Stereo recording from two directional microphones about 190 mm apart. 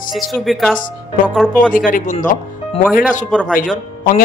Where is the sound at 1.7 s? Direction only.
45° left (ahead or behind).